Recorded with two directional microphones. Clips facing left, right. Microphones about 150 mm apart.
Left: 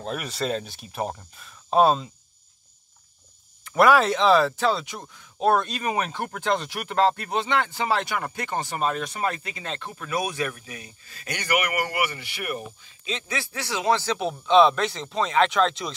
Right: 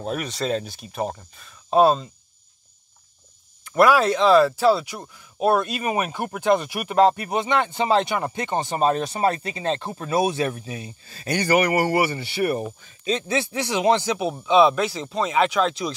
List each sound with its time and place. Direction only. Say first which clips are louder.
0.0 s speech: right 2 dB; centre (ahead or behind)
3.6 s speech: right 1 dB; centre (ahead or behind); by 13.2 s 40° right (ahead or behind)
13.3 s speech: right 7 dB; 20° right (ahead or behind)
14.4 s speech: right 1 dB; 5° right (ahead or behind)